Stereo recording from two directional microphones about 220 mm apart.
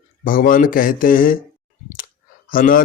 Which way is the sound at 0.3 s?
40° left (ahead or behind).